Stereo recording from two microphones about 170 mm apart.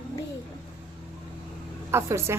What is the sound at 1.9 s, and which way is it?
Speech, 15° right (ahead or behind).